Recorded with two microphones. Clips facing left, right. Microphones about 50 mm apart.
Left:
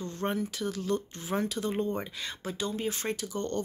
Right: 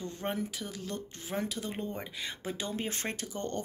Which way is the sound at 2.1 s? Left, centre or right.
Centre.